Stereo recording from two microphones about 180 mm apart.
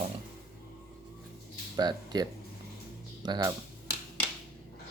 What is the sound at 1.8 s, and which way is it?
Speech, 25° right (ahead or behind).